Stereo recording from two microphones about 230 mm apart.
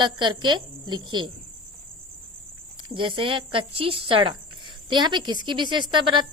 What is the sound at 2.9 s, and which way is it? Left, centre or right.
A woman's voice, right.